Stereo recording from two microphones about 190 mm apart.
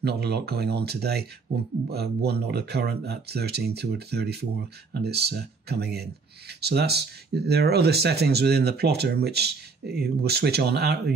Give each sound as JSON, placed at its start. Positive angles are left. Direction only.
{"t": 0.0, "sound": "speech", "side_deg": -55}